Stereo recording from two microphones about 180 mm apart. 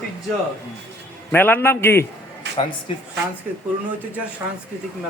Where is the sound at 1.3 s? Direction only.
10° left (ahead or behind).